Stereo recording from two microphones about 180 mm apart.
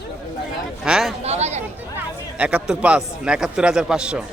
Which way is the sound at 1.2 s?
35° right (ahead or behind).